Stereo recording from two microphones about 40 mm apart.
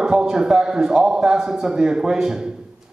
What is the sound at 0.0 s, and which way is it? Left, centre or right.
A man's voice, centre.